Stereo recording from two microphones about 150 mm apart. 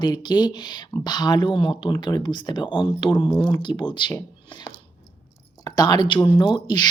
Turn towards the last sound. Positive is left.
turn(degrees=30)  # may be behind; listen again after turning